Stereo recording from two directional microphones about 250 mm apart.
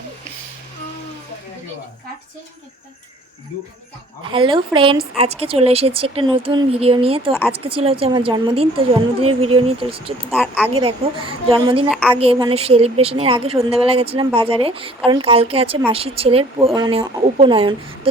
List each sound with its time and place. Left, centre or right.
4.3 s speech: centre
7.3 s a woman's voice: centre
7.6 s speech: right
10.3 s a woman's voice: centre
10.8 s speech: right
11.9 s a woman's voice: centre
12.1 s speech: right